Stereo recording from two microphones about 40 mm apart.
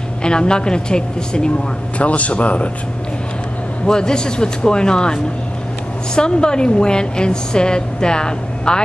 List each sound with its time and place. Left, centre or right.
0.2 s a woman's voice: left
2.0 s speech: left
3.8 s a woman's voice: centre